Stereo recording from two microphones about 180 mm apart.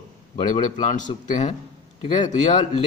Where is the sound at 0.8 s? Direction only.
45° left (ahead or behind).